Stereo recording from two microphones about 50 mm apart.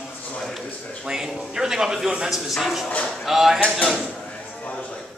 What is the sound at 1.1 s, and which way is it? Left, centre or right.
A man's voice, centre.